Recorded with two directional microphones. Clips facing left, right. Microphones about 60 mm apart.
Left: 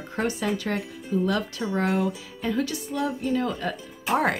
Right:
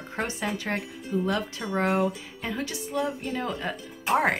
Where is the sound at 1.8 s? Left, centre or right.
Centre.